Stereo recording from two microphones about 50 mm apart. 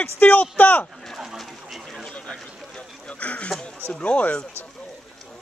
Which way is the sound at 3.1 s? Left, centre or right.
Left.